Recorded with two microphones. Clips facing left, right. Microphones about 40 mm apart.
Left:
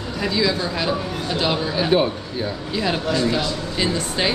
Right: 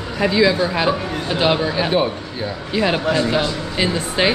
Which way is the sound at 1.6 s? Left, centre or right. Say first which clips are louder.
Right 1 dB; centre.